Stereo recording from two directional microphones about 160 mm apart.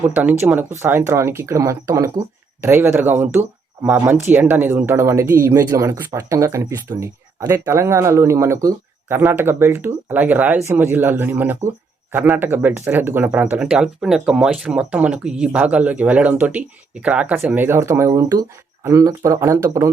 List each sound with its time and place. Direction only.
0.1 s speech: 10° right (ahead or behind)